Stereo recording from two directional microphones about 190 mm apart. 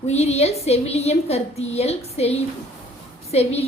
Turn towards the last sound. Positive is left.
turn(degrees=35)  # may be behind; listen again after turning